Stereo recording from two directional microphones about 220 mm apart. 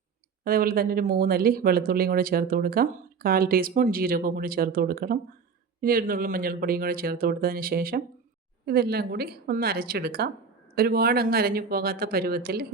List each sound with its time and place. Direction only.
0.4 s speech: 40° right (ahead or behind)